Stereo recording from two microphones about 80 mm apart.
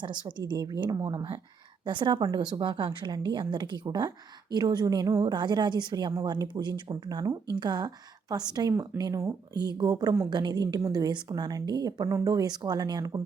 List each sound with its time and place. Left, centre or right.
0.0 s a woman's voice: right
0.8 s a woman's voice: right
1.0 s speech: right
1.9 s a woman's voice: right
5.2 s a woman's voice: right
7.1 s a woman's voice: right
7.5 s a woman's voice: right
8.9 s speech: right
9.6 s a woman's voice: right